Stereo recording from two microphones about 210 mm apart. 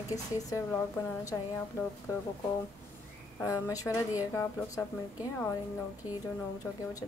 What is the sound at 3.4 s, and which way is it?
A woman's voice, 15° left (ahead or behind).